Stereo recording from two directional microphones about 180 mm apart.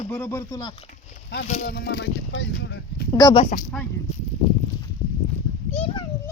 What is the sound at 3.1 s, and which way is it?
Speech, 20° left (ahead or behind).